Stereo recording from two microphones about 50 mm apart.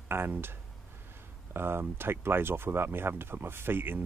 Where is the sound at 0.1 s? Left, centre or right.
Right.